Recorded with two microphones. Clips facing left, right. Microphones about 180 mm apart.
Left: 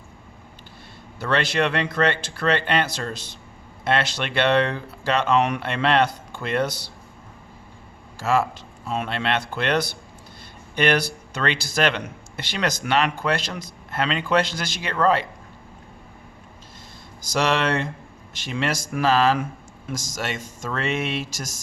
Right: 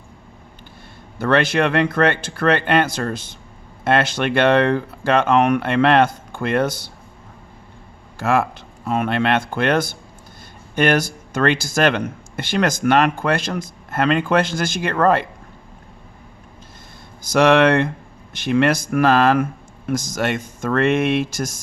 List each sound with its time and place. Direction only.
1.2 s speech: 50° right (ahead or behind)
8.2 s speech: 60° right (ahead or behind)
17.2 s speech: 55° right (ahead or behind)